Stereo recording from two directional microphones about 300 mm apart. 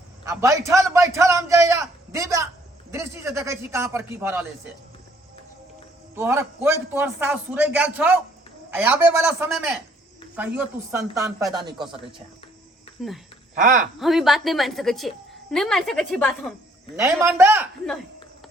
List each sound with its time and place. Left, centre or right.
0.3 s a man's voice: centre
6.1 s a woman's voice: centre
13.6 s speech: right
14.0 s a woman's voice: centre
17.0 s a man's voice: centre